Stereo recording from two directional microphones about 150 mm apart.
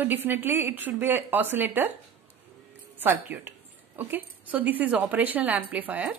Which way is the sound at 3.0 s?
15° right (ahead or behind).